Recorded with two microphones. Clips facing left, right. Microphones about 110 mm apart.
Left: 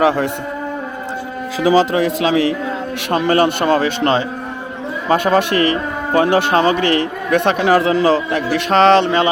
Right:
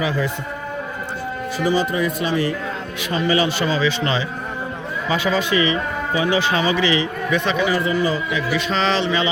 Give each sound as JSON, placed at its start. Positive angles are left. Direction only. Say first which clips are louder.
{"t": 0.0, "sound": "a man's voice", "louder": "left 7 dB", "side_deg": 70}
{"t": 1.5, "sound": "speech", "louder": "left 7 dB", "side_deg": 90}
{"t": 3.1, "sound": "speech", "louder": "left 5 dB", "side_deg": 60}